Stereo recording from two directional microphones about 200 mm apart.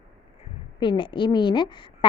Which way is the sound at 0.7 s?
25° left (ahead or behind).